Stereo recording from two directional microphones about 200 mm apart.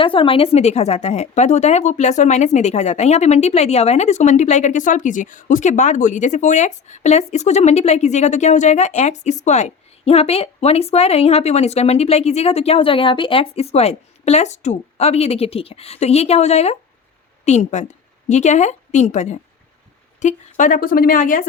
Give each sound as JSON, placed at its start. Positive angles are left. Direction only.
{"t": 0.0, "sound": "a woman's voice", "side_deg": 25}